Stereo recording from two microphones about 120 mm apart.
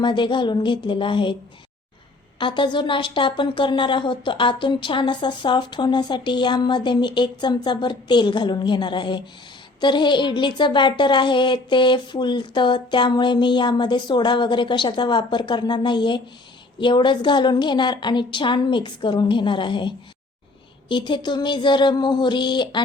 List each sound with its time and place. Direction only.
0.0 s speech: 40° left (ahead or behind)
2.4 s speech: 40° left (ahead or behind)